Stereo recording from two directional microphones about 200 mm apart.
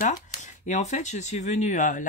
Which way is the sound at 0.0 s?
40° left (ahead or behind).